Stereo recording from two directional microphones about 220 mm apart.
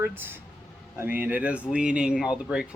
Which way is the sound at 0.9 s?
10° right (ahead or behind).